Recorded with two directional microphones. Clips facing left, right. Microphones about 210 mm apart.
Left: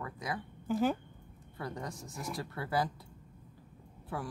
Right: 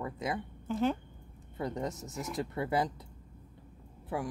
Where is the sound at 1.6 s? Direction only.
20° right (ahead or behind).